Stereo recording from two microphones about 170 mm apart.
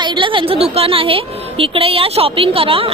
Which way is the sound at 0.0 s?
30° right (ahead or behind).